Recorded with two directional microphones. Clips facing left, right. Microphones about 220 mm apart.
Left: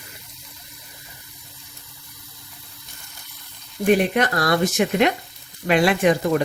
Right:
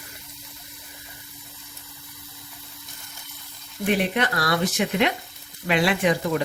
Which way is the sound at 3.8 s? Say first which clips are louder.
Left 5 dB; 45° left (ahead or behind).